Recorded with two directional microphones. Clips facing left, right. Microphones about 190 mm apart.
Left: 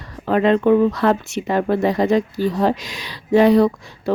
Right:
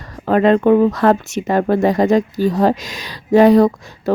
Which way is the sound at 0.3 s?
45° right (ahead or behind).